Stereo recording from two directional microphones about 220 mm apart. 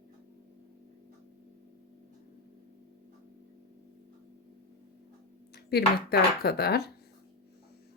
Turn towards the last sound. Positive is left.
turn(degrees=45)  # may be behind; listen again after turning